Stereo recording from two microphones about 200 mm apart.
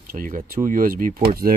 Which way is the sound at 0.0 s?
45° right (ahead or behind).